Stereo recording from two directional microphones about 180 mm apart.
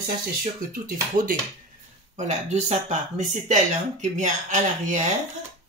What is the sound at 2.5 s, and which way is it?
Speech, 40° right (ahead or behind).